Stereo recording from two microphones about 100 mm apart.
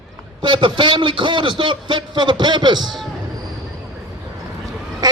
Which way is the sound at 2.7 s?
Centre (ahead or behind).